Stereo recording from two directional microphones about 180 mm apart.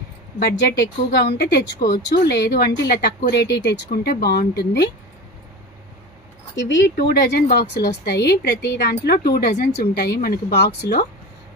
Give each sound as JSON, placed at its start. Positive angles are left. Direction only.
{"t": 1.1, "sound": "speech", "side_deg": 70}
{"t": 6.5, "sound": "speech", "side_deg": 85}